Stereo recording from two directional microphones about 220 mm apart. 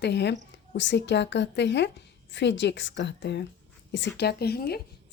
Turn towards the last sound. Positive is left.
turn(degrees=45)  # may be behind; listen again after turning